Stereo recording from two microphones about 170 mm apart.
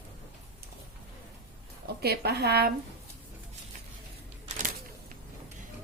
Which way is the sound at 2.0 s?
70° right (ahead or behind).